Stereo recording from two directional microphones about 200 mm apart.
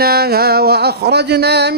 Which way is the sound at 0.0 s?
50° right (ahead or behind).